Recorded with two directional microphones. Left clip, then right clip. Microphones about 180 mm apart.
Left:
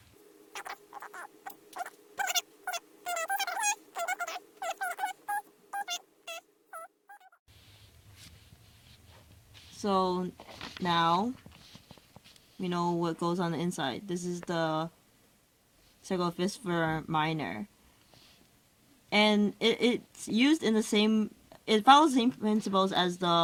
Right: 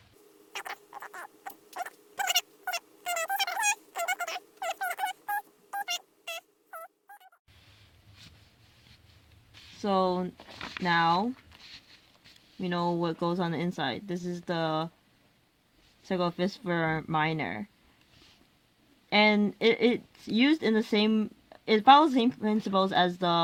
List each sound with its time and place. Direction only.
0.5 s rodents: 10° right (ahead or behind)
9.8 s speech: 30° right (ahead or behind)
10.3 s a sound: 5° right (ahead or behind)
10.8 s speech: 35° right (ahead or behind)
12.5 s speech: 30° right (ahead or behind)
16.0 s speech: 30° right (ahead or behind)
19.1 s speech: 30° right (ahead or behind)